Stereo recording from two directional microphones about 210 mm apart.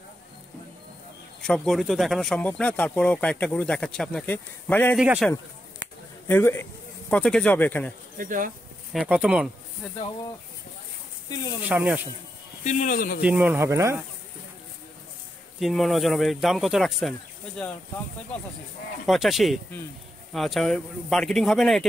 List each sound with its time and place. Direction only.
1.4 s speech: centre (ahead or behind)
4.9 s speech: 5° right (ahead or behind)
6.2 s speech: 10° left (ahead or behind)
8.2 s speech: 40° right (ahead or behind)
8.9 s speech: 5° right (ahead or behind)
11.2 s speech: 20° left (ahead or behind)
11.7 s speech: 5° right (ahead or behind)
12.6 s speech: 35° left (ahead or behind)
13.2 s speech: 5° right (ahead or behind)
15.6 s speech: centre (ahead or behind)
19.0 s speech: centre (ahead or behind)